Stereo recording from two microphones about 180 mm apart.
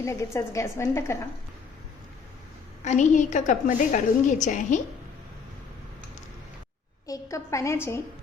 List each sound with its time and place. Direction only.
0.0 s a woman's voice: 15° left (ahead or behind)
2.8 s a woman's voice: 40° left (ahead or behind)
7.1 s a woman's voice: 15° left (ahead or behind)